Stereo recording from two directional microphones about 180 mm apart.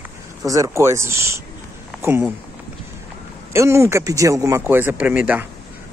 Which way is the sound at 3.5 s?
15° right (ahead or behind).